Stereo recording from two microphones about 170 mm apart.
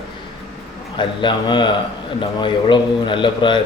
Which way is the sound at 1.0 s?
30° left (ahead or behind).